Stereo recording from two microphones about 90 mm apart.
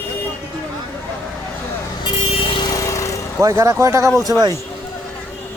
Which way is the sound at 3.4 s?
40° right (ahead or behind).